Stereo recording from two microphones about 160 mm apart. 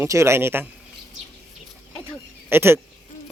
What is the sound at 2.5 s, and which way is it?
Speech, 15° right (ahead or behind).